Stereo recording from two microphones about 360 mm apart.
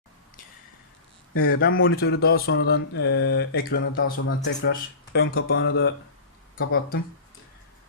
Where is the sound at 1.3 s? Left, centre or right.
Left.